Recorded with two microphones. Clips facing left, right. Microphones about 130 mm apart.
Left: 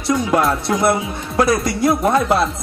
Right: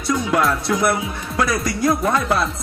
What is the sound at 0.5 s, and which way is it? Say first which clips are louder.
Speech: left 2 dB; 25° left (ahead or behind).